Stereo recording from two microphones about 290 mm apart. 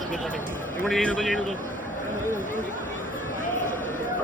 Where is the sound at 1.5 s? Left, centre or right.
Left.